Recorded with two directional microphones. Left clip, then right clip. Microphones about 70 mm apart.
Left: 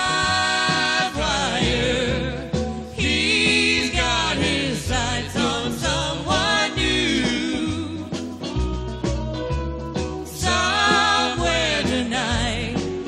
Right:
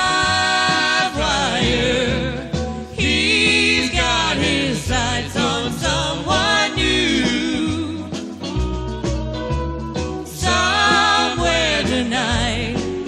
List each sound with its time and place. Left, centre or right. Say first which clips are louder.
0.0 s music: right 3 dB; left
9.9 s music: right 1 dB; left